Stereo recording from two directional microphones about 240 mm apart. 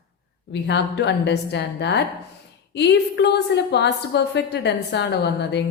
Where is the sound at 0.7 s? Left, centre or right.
Left.